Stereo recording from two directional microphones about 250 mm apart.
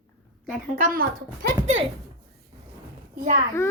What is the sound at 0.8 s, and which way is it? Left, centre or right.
Speech, right.